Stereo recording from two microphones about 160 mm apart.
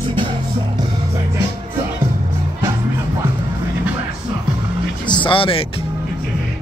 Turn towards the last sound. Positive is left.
turn(degrees=35)  # may be behind; listen again after turning